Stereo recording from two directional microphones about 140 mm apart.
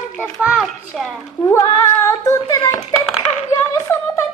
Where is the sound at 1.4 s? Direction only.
25° left (ahead or behind).